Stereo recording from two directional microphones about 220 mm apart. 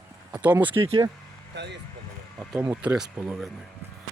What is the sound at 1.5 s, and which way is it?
Speech, 50° right (ahead or behind).